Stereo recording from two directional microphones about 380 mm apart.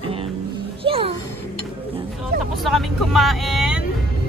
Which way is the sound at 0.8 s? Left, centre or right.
Centre.